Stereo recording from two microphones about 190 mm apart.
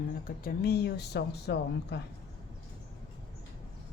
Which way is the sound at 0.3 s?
50° left (ahead or behind).